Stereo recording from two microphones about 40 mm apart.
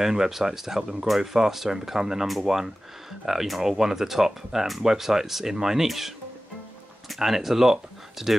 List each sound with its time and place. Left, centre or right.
0.0 s speech: centre
7.2 s speech: centre